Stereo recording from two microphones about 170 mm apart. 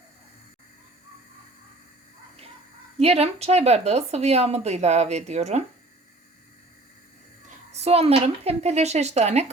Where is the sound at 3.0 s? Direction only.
35° right (ahead or behind).